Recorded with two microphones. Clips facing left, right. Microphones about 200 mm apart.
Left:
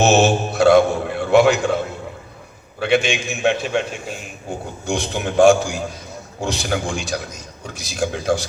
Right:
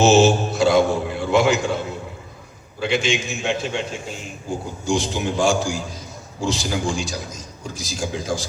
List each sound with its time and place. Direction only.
0.0 s mantra: 60° left (ahead or behind)
2.8 s a man's voice: 60° left (ahead or behind)